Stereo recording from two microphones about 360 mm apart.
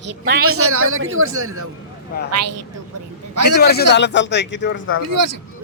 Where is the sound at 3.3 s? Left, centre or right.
Right.